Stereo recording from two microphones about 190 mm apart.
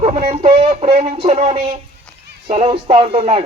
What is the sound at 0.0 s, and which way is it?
Speech, 35° right (ahead or behind).